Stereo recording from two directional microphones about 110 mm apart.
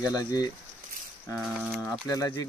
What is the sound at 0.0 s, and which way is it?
Speech, 35° left (ahead or behind).